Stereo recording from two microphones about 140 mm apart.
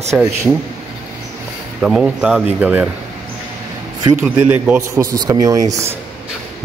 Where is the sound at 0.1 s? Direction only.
20° right (ahead or behind).